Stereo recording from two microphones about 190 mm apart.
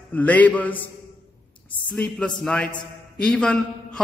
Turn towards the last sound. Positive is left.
turn(degrees=5)  # may be behind; listen again after turning